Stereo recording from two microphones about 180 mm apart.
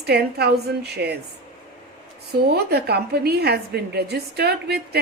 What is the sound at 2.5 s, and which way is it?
A woman's voice, 65° right (ahead or behind).